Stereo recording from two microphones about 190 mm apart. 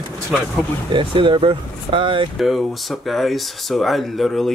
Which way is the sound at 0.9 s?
25° right (ahead or behind).